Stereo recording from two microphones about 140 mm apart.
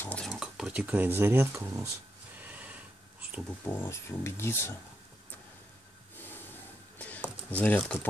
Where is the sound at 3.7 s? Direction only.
15° left (ahead or behind).